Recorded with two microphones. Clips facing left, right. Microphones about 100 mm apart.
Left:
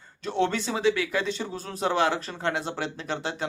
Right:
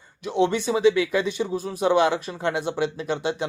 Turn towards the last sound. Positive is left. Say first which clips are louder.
# right 5 dB
turn(degrees=-20)  # may be behind; listen again after turning